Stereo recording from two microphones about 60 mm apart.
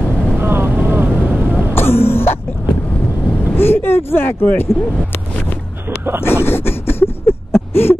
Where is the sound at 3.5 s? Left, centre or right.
Left.